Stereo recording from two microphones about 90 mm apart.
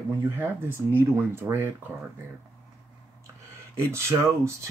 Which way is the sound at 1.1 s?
25° right (ahead or behind).